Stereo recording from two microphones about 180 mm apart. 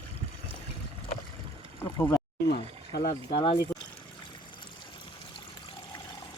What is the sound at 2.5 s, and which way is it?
Speech, 55° left (ahead or behind).